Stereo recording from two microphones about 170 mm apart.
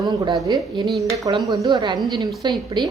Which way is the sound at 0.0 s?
25° right (ahead or behind).